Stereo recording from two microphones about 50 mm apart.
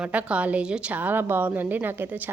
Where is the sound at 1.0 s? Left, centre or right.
Right.